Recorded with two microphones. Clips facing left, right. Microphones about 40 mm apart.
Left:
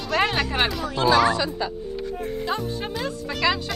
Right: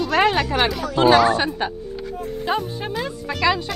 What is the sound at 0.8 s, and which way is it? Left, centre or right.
Speech, right.